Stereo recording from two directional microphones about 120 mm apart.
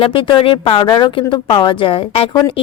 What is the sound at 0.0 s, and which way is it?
A woman's voice, 50° left (ahead or behind).